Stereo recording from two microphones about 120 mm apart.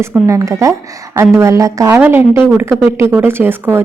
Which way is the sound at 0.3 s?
25° right (ahead or behind).